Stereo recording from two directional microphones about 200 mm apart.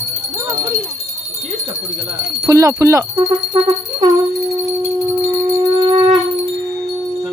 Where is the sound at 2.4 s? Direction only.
15° right (ahead or behind).